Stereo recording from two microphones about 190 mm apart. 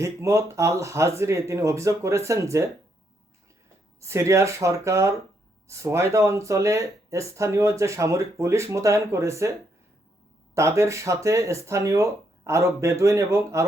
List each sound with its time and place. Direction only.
0.0 s speech: 15° right (ahead or behind)
4.0 s speech: 15° right (ahead or behind)